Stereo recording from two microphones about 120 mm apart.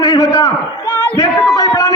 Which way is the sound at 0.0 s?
30° left (ahead or behind).